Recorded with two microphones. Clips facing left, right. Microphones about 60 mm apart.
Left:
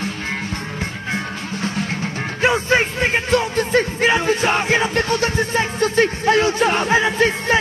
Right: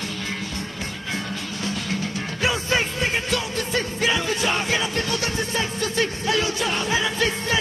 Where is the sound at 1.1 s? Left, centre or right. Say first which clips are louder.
Left 2 dB; left.